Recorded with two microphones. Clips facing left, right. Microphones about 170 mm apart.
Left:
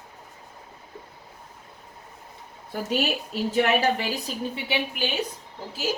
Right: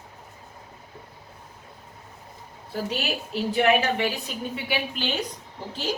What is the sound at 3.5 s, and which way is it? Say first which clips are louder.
Speech: right 1 dB; 40° left (ahead or behind).